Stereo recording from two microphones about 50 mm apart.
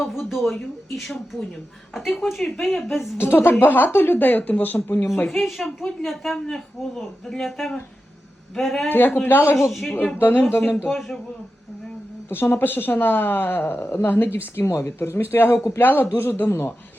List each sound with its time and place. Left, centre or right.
0.0 s a woman's voice: centre
3.2 s a woman's voice: left
5.3 s a woman's voice: centre
6.4 s a woman's voice: centre
8.9 s a woman's voice: left
9.6 s a woman's voice: centre
10.2 s a woman's voice: left
12.3 s speech: left
14.7 s speech: left
15.8 s a woman's voice: left